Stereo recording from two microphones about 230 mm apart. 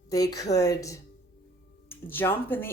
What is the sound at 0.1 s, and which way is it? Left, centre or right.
A woman's voice, centre.